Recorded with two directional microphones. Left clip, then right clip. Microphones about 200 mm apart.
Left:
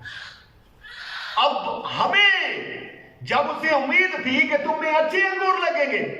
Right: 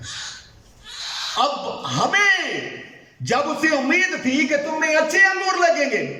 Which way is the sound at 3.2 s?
40° right (ahead or behind).